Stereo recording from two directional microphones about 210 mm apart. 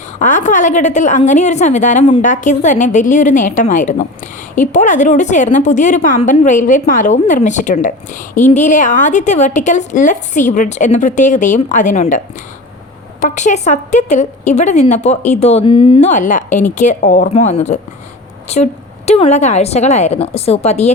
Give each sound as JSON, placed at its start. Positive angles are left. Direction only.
{"t": 0.2, "sound": "a woman's voice", "side_deg": 35}